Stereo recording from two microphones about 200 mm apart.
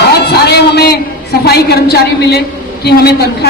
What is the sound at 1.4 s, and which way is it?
A woman's voice, 55° left (ahead or behind).